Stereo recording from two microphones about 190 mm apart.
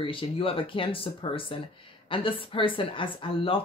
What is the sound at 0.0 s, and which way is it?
Speech, 25° left (ahead or behind).